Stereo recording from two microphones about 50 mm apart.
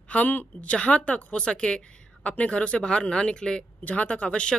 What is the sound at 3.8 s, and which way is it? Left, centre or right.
Speech, left.